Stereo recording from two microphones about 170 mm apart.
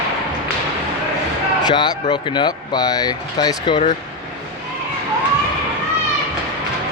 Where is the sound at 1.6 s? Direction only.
25° left (ahead or behind).